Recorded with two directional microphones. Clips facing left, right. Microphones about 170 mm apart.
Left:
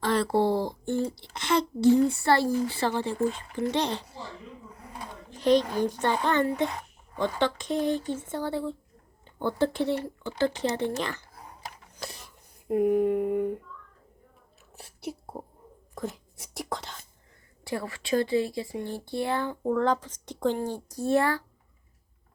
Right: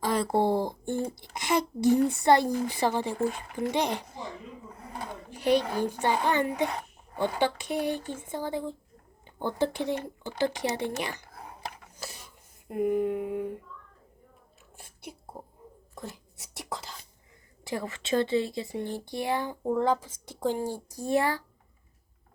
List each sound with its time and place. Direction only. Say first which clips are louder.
0.0 s a sound: left 2 dB; 10° right (ahead or behind)
0.9 s speech: left 4 dB; 50° right (ahead or behind)
1.3 s a woman's voice: even; 15° right (ahead or behind)
5.3 s a sound: left 3 dB; 10° right (ahead or behind)
5.8 s speech: left 1 dB; 10° right (ahead or behind)
11.9 s speech: left 2 dB; centre (ahead or behind)
14.8 s a sound: left 8 dB; 5° left (ahead or behind)
16.0 s whispering: left 7 dB; centre (ahead or behind)
17.6 s speech: left 1 dB; 20° right (ahead or behind)